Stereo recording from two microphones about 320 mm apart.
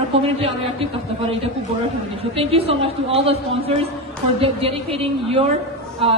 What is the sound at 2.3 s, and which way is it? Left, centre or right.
A woman's voice, centre.